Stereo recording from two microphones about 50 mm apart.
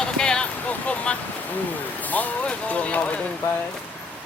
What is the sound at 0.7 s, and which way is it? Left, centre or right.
Speech, left.